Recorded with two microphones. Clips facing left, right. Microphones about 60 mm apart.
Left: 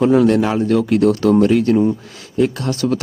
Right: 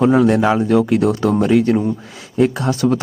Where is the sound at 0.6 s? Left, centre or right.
Centre.